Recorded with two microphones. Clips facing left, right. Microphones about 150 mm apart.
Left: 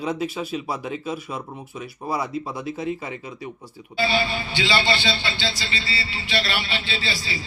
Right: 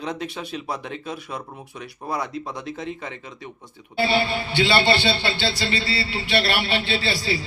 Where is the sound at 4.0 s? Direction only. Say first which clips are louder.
Right 2 dB; 60° right (ahead or behind).